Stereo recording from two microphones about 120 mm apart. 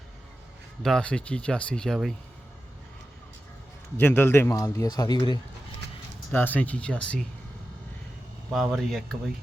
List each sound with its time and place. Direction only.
0.8 s speech: 5° left (ahead or behind)
3.9 s a man's voice: 15° left (ahead or behind); by 5.4 s 35° left (ahead or behind)
6.3 s speech: 15° left (ahead or behind)
8.7 s speech: centre (ahead or behind)